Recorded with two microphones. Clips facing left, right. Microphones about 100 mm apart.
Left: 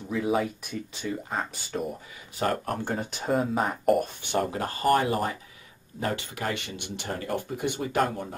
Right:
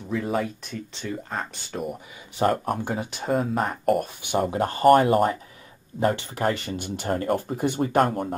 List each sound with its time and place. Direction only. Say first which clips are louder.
0.1 s speech: even; 5° left (ahead or behind)
2.3 s speech: right 5 dB; 25° right (ahead or behind)
2.7 s speech: right 2 dB; 5° right (ahead or behind)
4.2 s speech: right 3 dB; 15° right (ahead or behind)
4.6 s speech: right 6 dB; 30° right (ahead or behind)
4.8 s speech: right 7 dB; 45° right (ahead or behind)
5.9 s speech: right 7 dB; 35° right (ahead or behind)